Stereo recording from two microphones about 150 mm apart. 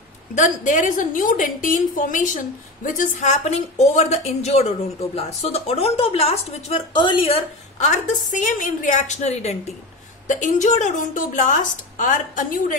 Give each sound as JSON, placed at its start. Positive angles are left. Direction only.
{"t": 0.3, "sound": "a woman's voice", "side_deg": 55}
{"t": 7.8, "sound": "a woman's voice", "side_deg": 55}